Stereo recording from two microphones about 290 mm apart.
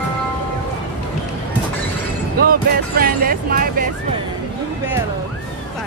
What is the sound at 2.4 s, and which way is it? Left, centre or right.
Speech, right.